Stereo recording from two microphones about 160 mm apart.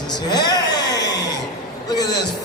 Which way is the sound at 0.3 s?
25° left (ahead or behind).